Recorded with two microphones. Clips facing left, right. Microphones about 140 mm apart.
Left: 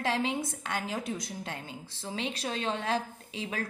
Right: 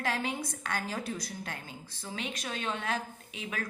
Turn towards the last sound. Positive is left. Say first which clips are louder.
# left 3 dB
turn(degrees=30)  # may be behind; listen again after turning